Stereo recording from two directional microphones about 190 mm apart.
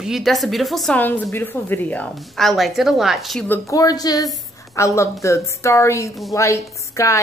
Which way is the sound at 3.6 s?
15° left (ahead or behind).